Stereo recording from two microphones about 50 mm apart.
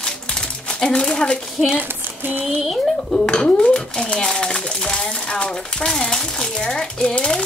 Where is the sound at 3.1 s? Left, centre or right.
Centre.